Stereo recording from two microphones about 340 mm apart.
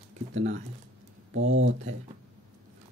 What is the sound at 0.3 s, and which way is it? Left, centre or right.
Speech, right.